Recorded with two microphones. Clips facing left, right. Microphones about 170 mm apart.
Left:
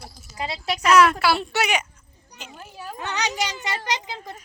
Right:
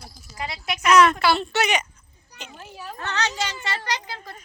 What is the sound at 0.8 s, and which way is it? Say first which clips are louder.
A woman's voice: even; 5° left (ahead or behind).